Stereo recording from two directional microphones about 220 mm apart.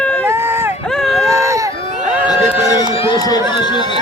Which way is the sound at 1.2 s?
15° right (ahead or behind).